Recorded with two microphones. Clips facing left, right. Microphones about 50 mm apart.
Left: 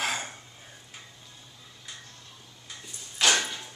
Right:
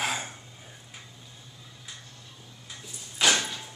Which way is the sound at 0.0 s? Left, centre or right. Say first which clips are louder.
Even; centre.